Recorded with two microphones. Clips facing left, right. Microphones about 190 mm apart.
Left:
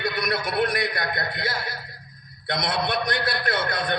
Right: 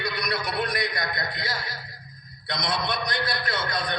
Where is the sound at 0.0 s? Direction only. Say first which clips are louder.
Left 3 dB; 55° left (ahead or behind).